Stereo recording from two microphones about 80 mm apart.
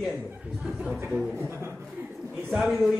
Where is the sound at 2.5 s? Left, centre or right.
Centre.